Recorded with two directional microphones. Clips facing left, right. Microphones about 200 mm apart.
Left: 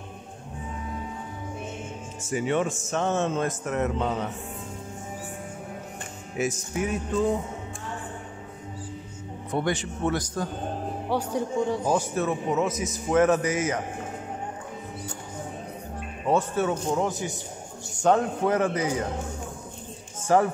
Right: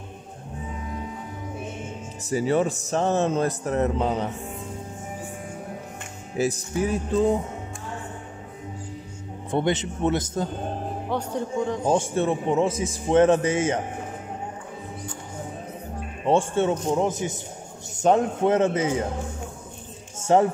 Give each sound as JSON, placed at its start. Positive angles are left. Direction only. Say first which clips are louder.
{"t": 2.2, "sound": "speech", "louder": "right 3 dB", "side_deg": -35}
{"t": 6.3, "sound": "speech", "louder": "right 3 dB", "side_deg": -35}
{"t": 9.5, "sound": "a man's voice", "louder": "right 3 dB", "side_deg": -20}
{"t": 11.1, "sound": "a man's voice", "louder": "left 1 dB", "side_deg": 10}
{"t": 11.8, "sound": "a man's voice", "louder": "right 3 dB", "side_deg": -25}
{"t": 16.3, "sound": "a man's voice", "louder": "right 3 dB", "side_deg": -25}
{"t": 20.2, "sound": "a sound", "louder": "right 2 dB", "side_deg": -25}